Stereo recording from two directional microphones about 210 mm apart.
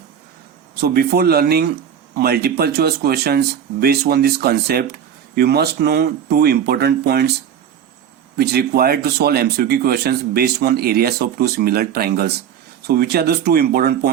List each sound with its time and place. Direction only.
0.8 s speech: 50° right (ahead or behind)
8.4 s speech: 50° right (ahead or behind)